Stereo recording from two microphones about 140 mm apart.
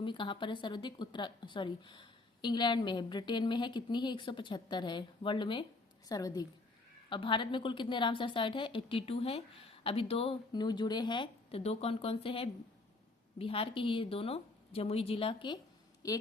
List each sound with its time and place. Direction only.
0.0 s a woman's voice: 35° left (ahead or behind)
7.1 s a woman's voice: 35° left (ahead or behind)
10.5 s a woman's voice: 30° left (ahead or behind)